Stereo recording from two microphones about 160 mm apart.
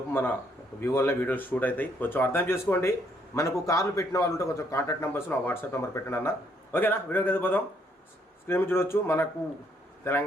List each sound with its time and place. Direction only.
0.1 s a man's voice: 15° left (ahead or behind)